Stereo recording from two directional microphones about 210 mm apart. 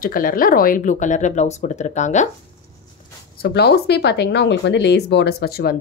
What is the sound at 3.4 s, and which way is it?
Speech, 50° left (ahead or behind).